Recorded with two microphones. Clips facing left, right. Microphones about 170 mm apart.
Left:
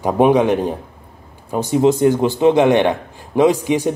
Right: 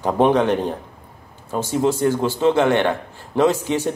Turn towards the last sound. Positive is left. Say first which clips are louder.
# left 4 dB
turn(degrees=15)  # may be behind; listen again after turning